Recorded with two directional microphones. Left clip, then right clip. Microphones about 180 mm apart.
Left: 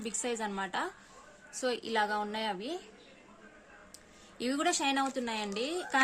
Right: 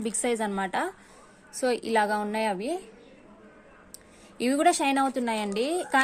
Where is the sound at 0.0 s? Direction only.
25° right (ahead or behind).